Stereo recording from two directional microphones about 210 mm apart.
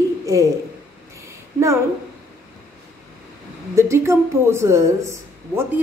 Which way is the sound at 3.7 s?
15° right (ahead or behind).